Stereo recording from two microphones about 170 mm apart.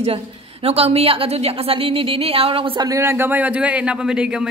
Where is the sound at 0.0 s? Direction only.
35° right (ahead or behind).